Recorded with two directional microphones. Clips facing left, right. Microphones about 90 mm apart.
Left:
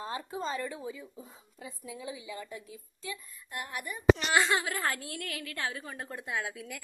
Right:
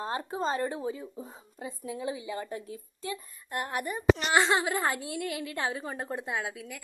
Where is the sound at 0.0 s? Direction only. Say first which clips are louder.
Right 5 dB; 45° right (ahead or behind).